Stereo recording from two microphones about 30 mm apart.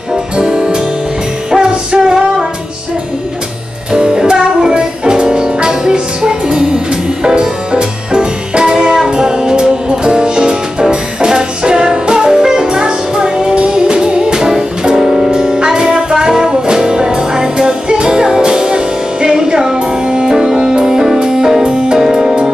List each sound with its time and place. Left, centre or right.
0.4 s music: right
3.9 s music: right